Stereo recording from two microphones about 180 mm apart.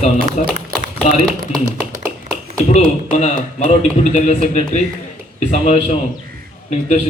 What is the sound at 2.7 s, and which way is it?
A man's voice, 40° left (ahead or behind).